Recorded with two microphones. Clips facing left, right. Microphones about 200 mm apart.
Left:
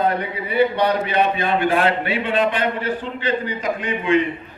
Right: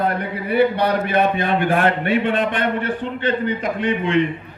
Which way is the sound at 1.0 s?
50° right (ahead or behind).